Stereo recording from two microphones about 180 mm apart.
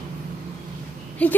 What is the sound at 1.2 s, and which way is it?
Speech, 10° left (ahead or behind).